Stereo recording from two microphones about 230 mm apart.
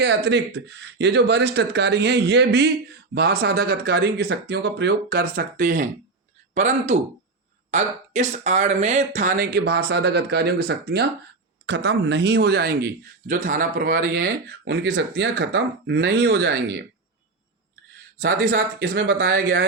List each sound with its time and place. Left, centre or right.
0.0 s speech: right
18.2 s speech: right